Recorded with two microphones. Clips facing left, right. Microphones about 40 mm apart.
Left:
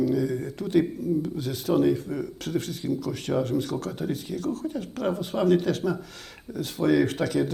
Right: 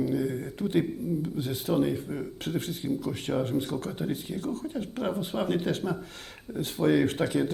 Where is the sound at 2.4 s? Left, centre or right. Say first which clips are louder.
Left 2 dB; right.